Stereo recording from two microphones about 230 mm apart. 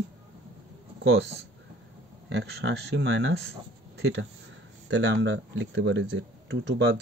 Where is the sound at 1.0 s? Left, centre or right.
Right.